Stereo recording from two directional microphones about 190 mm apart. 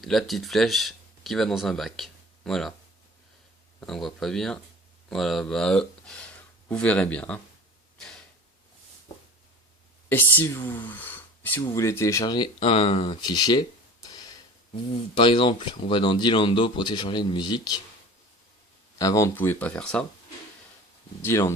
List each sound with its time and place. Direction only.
0.0 s speech: centre (ahead or behind)
3.8 s speech: centre (ahead or behind)
7.9 s a sound: 5° left (ahead or behind)
10.1 s speech: 10° left (ahead or behind)
18.9 s speech: 15° left (ahead or behind)
21.2 s speech: 15° left (ahead or behind)